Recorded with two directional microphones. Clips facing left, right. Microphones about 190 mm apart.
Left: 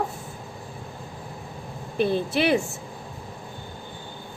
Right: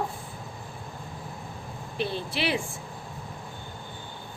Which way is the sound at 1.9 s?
50° left (ahead or behind).